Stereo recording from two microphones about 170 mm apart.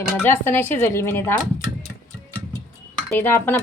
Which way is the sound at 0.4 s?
15° left (ahead or behind).